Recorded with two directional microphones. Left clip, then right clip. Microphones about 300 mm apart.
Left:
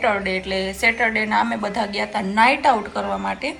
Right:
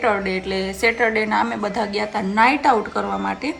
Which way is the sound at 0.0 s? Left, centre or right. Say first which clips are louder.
Even; centre.